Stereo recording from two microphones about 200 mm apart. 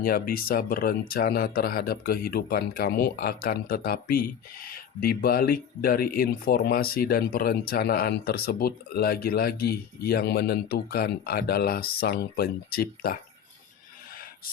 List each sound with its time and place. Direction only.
0.0 s speech: 45° left (ahead or behind)